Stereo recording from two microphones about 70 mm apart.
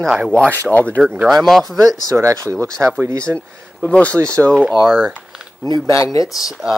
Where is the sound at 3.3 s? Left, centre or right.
Centre.